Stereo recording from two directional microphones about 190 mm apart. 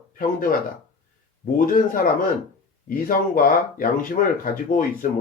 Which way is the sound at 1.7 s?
45° left (ahead or behind).